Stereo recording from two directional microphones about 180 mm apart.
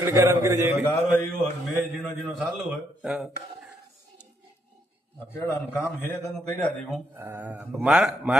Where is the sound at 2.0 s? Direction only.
Centre (ahead or behind).